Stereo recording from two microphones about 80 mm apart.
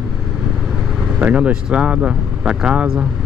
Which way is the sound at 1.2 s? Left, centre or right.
Centre.